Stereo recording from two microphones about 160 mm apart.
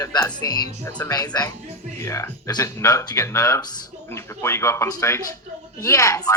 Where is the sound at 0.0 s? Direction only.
25° left (ahead or behind).